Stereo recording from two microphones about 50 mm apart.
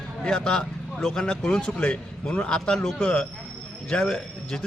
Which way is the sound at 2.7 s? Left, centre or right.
Centre.